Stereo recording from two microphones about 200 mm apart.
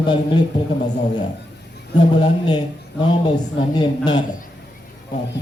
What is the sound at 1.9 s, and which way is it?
Speech, 20° left (ahead or behind).